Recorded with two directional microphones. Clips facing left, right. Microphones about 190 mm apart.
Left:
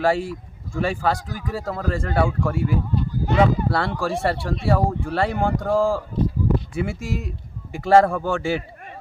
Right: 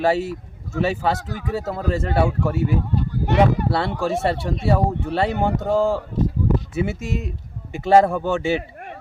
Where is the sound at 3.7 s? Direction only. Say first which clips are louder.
Right 1 dB; 20° right (ahead or behind).